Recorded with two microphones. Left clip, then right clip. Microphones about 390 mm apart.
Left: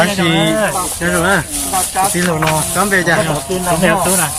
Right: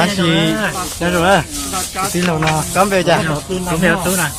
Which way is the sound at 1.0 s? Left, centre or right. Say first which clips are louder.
Right 2 dB; centre.